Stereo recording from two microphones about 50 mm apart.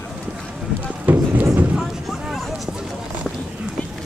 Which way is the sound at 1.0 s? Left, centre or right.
Right.